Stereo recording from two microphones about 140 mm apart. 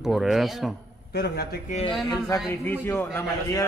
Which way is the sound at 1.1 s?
90° left.